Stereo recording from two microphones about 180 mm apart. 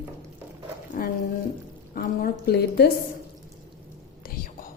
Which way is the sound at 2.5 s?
60° left (ahead or behind).